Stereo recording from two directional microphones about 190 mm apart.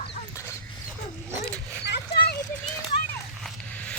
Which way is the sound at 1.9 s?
60° left (ahead or behind).